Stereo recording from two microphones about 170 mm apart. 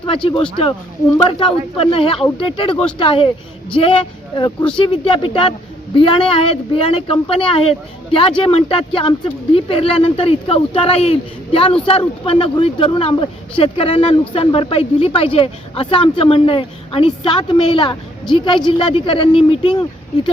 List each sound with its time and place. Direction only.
0.0 s speech: 30° left (ahead or behind)